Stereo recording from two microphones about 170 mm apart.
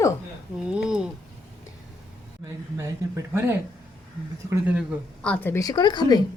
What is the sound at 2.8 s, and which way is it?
Speech, 15° right (ahead or behind).